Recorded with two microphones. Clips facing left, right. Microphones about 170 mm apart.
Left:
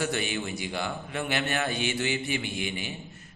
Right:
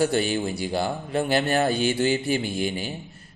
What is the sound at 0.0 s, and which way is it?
Speech, 35° right (ahead or behind).